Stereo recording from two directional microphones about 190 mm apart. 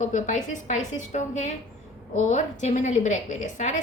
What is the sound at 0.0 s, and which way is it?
A woman's voice, 40° left (ahead or behind).